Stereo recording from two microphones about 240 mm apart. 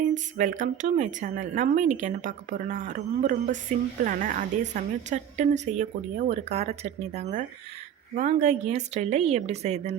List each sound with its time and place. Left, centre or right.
0.1 s a woman's voice: right